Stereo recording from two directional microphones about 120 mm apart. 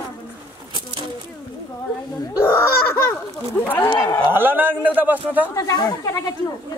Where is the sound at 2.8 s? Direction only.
20° left (ahead or behind).